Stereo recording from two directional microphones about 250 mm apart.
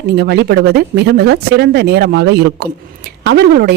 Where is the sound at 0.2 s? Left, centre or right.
Right.